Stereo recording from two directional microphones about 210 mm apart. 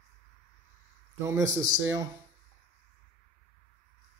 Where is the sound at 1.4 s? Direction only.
15° right (ahead or behind).